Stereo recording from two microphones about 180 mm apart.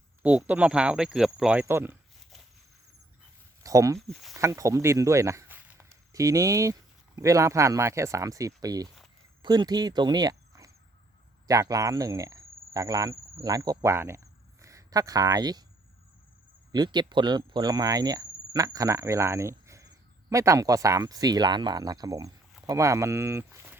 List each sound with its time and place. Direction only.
0.2 s speech: 10° right (ahead or behind)
3.6 s a sound: 20° right (ahead or behind)
3.9 s speech: centre (ahead or behind)
4.4 s speech: 15° right (ahead or behind)
16.7 s speech: 25° right (ahead or behind)